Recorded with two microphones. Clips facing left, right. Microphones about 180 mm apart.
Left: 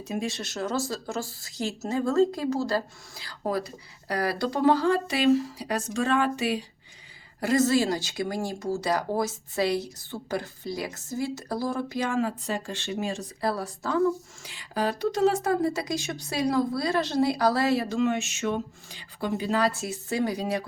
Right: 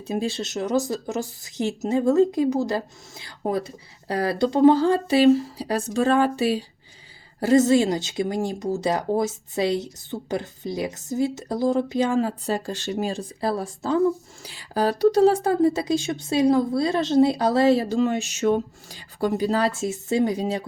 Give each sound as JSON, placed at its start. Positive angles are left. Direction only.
{"t": 0.0, "sound": "speech", "side_deg": -30}